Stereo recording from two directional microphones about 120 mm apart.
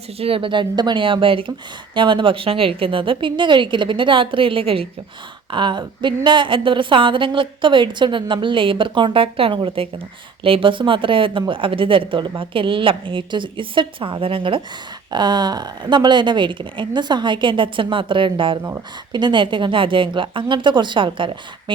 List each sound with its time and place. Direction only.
0.2 s a woman's voice: 50° right (ahead or behind)